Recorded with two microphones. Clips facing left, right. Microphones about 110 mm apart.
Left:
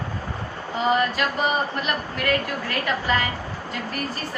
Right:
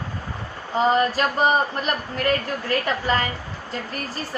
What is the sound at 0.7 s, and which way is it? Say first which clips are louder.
Speech: right 3 dB; 35° right (ahead or behind).